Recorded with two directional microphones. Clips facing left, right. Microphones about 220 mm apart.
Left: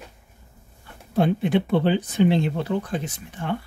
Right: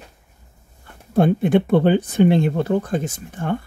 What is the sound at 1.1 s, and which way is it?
Speech, 50° right (ahead or behind).